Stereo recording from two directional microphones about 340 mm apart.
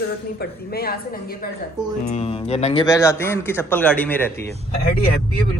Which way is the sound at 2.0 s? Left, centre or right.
Centre.